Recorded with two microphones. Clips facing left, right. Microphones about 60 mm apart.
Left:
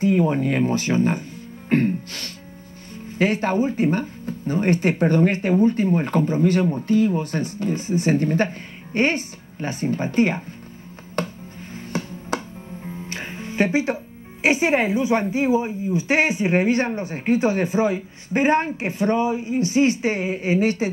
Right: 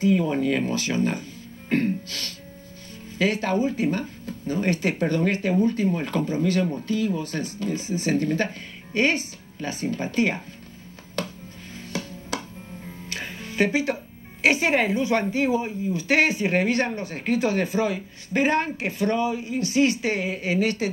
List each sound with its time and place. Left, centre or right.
0.0 s speech: left
11.2 s a sound: left
11.7 s music: left
14.4 s a woman's voice: left